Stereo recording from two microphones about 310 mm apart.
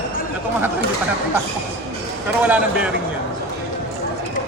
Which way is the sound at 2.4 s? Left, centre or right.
Centre.